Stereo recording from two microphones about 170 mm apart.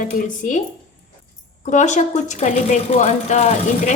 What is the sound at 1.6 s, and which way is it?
A woman's voice, 45° left (ahead or behind).